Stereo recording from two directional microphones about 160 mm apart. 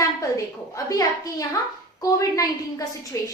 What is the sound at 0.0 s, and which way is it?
A woman's voice, 20° left (ahead or behind).